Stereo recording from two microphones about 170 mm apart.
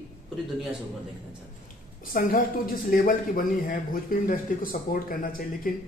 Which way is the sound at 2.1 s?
55° left (ahead or behind).